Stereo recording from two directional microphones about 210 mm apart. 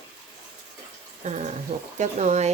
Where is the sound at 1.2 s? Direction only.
35° right (ahead or behind).